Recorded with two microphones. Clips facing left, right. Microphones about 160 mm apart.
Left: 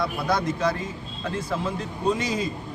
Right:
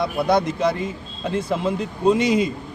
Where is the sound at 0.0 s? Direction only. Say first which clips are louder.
Right 5 dB; 20° right (ahead or behind).